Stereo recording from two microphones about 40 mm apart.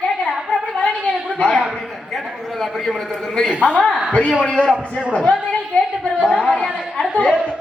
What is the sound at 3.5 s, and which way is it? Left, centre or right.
Speech, right.